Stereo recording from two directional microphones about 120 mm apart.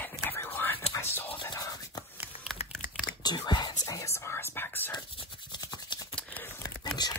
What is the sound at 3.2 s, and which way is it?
Whispering, 35° left (ahead or behind).